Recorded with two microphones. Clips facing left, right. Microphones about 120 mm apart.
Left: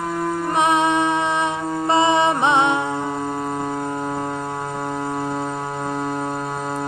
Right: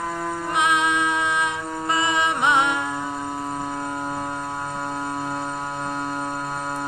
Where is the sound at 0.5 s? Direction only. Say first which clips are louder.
Left 4 dB; 35° left (ahead or behind).